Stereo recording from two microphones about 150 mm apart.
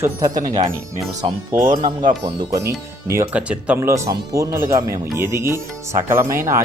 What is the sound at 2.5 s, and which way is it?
Speech, 20° right (ahead or behind).